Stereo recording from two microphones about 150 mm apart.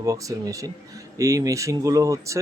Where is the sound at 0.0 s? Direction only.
20° right (ahead or behind).